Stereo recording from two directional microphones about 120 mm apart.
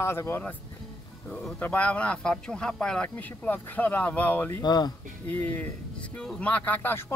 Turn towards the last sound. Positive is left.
turn(degrees=15)  # may be behind; listen again after turning